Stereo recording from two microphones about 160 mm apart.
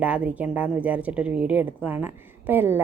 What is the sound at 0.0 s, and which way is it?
A woman's voice, 10° right (ahead or behind).